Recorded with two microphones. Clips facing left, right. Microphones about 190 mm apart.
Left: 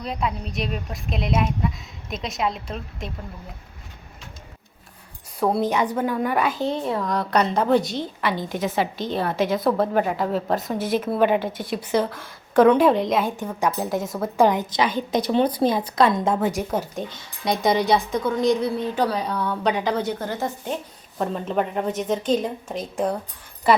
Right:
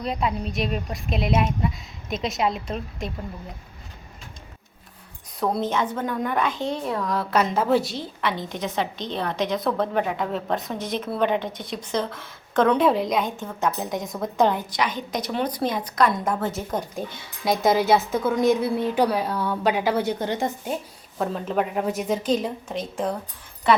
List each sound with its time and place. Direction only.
0.0 s a woman's voice: centre (ahead or behind)
5.4 s a woman's voice: 10° left (ahead or behind)
13.3 s speech: 15° left (ahead or behind)
13.7 s a woman's voice: 5° left (ahead or behind)
14.8 s a woman's voice: 30° left (ahead or behind); by 16.9 s 10° left (ahead or behind)
17.1 s a woman's voice: 5° right (ahead or behind)
21.2 s a woman's voice: centre (ahead or behind)